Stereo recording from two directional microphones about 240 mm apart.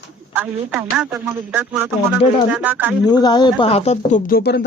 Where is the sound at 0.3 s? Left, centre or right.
Centre.